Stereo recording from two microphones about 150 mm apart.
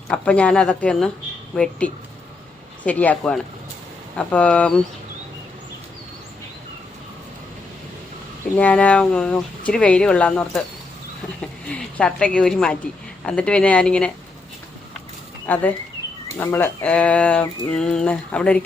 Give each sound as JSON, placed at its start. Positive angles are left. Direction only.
{"t": 0.1, "sound": "speech", "side_deg": 5}
{"t": 8.5, "sound": "speech", "side_deg": 10}
{"t": 11.3, "sound": "a sound", "side_deg": 10}
{"t": 13.2, "sound": "speech", "side_deg": 5}
{"t": 15.4, "sound": "speech", "side_deg": 10}